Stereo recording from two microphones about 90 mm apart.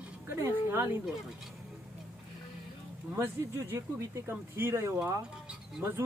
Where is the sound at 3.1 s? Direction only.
25° right (ahead or behind).